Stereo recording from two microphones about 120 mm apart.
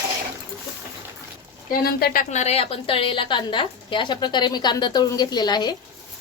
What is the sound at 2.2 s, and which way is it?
A woman's voice, 70° left (ahead or behind).